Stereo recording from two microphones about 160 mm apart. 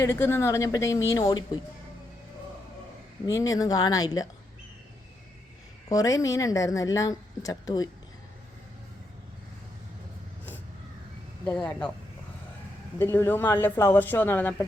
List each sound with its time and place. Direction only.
0.0 s a woman's voice: 15° left (ahead or behind)
3.2 s a woman's voice: 20° left (ahead or behind)
5.9 s a woman's voice: 20° left (ahead or behind)
11.4 s speech: 10° left (ahead or behind)
13.0 s speech: 15° left (ahead or behind)